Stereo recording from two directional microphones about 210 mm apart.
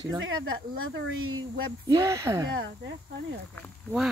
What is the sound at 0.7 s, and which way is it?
Speech, 80° right.